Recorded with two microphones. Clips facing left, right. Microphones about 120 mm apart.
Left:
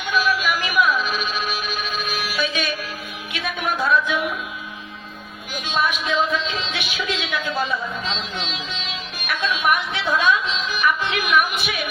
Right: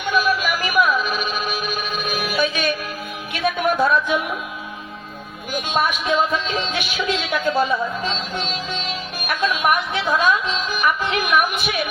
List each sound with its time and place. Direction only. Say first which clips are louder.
0.0 s music: right 2 dB; 50° right (ahead or behind)
3.3 s a sound: right 6 dB; 50° right (ahead or behind)
5.5 s a woman's voice: right 2 dB; 50° right (ahead or behind)